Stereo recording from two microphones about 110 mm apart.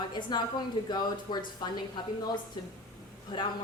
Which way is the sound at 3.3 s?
50° left (ahead or behind).